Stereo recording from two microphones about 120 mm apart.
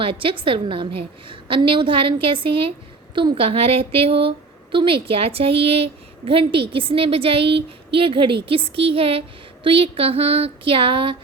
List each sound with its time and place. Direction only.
0.0 s speech: 45° right (ahead or behind)